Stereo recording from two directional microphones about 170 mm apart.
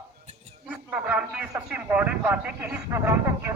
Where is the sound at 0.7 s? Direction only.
10° right (ahead or behind).